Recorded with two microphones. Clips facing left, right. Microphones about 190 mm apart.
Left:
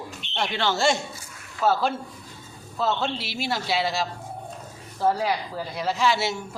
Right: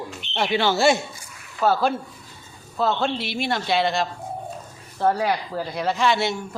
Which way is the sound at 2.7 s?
Centre (ahead or behind).